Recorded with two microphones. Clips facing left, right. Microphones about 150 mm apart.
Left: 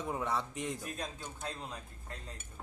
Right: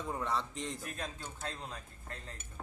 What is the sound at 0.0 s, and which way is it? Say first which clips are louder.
A man's voice: left 1 dB; 15° left (ahead or behind).